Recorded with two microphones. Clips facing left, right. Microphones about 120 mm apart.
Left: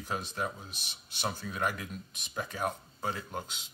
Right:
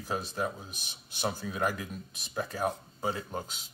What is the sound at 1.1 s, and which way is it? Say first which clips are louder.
Speech: right 3 dB; 10° right (ahead or behind).